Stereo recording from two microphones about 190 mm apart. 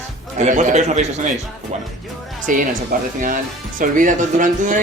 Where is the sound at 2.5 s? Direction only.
45° right (ahead or behind).